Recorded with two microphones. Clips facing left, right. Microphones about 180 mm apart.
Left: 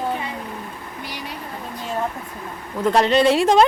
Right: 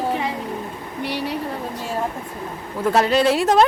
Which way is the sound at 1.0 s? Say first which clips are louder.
Right 9 dB; 70° right (ahead or behind).